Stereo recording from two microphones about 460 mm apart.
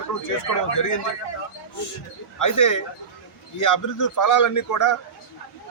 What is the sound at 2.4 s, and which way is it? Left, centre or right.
A man's voice, left.